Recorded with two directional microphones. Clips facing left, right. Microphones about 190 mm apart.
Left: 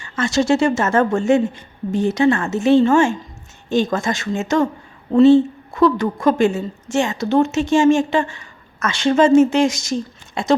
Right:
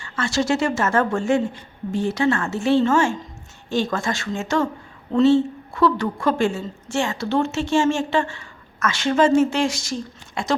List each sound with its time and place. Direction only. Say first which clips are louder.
0.0 s a woman's voice: left 4 dB; 20° left (ahead or behind)